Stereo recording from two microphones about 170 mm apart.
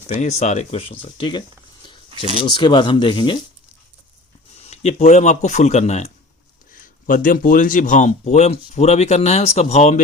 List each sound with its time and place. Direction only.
0.1 s speech: 40° left (ahead or behind)
4.6 s a sound: 40° left (ahead or behind)
4.9 s speech: 45° left (ahead or behind)
6.7 s speech: 50° left (ahead or behind)